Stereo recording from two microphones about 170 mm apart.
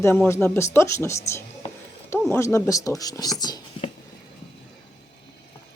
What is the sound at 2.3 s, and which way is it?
Speech, 15° left (ahead or behind).